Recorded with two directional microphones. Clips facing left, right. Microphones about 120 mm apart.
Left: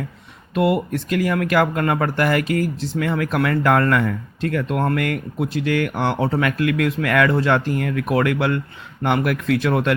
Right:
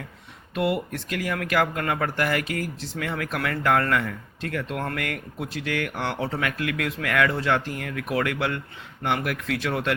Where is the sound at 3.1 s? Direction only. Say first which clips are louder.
Left 8 dB; 50° left (ahead or behind).